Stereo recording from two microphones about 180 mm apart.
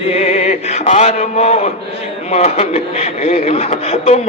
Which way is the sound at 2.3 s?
35° left (ahead or behind).